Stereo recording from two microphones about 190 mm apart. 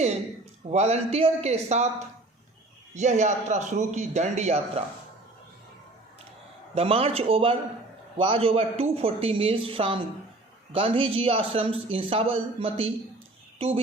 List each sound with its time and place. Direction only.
0.7 s a man's voice: 35° right (ahead or behind)
2.9 s a man's voice: 40° right (ahead or behind)
6.7 s a man's voice: 30° right (ahead or behind)